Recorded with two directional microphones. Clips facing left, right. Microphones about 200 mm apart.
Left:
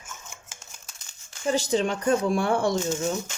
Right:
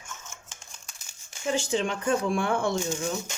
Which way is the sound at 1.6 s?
40° left (ahead or behind).